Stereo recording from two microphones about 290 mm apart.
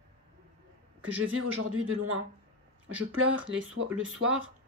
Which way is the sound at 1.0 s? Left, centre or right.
Right.